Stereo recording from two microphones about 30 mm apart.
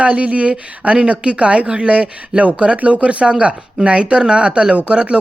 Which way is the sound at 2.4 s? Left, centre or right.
Right.